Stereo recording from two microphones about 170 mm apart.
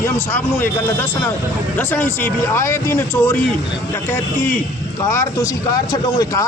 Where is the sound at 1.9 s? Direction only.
10° left (ahead or behind).